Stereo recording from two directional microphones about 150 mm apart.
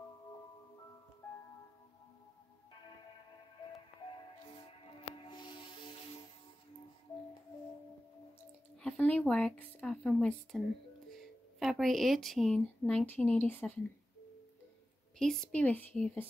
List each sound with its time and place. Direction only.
8.8 s speech: 10° left (ahead or behind)
11.6 s speech: centre (ahead or behind)
15.1 s speech: 5° left (ahead or behind)